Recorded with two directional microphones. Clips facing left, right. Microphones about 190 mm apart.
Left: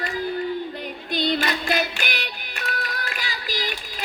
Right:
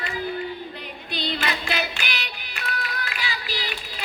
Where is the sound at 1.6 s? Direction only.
50° left (ahead or behind).